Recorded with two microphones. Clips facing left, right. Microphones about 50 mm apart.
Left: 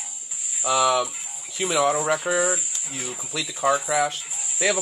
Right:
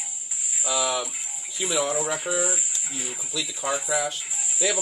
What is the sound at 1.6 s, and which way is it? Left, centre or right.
Speech, left.